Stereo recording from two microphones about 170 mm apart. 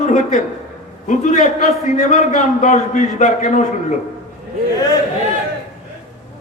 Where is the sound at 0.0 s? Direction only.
45° left (ahead or behind).